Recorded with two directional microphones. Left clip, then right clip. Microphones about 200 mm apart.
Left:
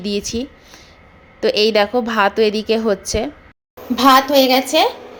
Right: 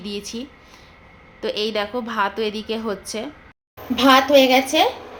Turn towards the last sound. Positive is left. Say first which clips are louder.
# left 1 dB
turn(degrees=10)  # may be behind; listen again after turning